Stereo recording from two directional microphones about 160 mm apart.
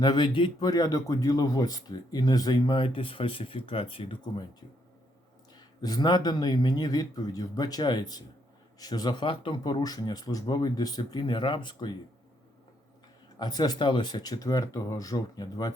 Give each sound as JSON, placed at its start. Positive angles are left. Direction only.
{"t": 0.0, "sound": "speech", "side_deg": 30}
{"t": 5.5, "sound": "speech", "side_deg": 25}
{"t": 13.4, "sound": "speech", "side_deg": 25}